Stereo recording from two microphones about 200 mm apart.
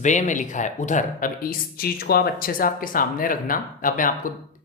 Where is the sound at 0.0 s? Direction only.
35° left (ahead or behind).